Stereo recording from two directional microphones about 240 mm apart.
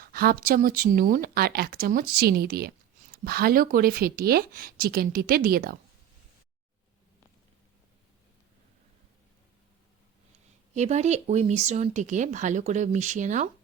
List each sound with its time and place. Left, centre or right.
0.0 s speech: right
10.8 s speech: right